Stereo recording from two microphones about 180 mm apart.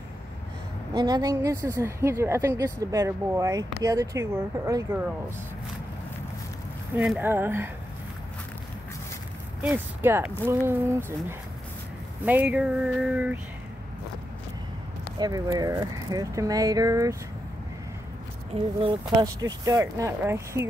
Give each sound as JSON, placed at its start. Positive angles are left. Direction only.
{"t": 0.9, "sound": "a woman's voice", "side_deg": -25}
{"t": 7.0, "sound": "a woman's voice", "side_deg": -10}
{"t": 9.6, "sound": "a woman's voice", "side_deg": -10}
{"t": 15.1, "sound": "speech", "side_deg": -20}
{"t": 18.5, "sound": "speech", "side_deg": -30}
{"t": 19.2, "sound": "a woman's voice", "side_deg": -20}